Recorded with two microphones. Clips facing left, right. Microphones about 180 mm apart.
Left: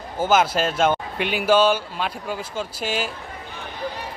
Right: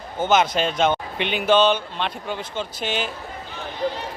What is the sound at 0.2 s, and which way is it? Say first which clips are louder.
A man's voice: even; 5° left (ahead or behind).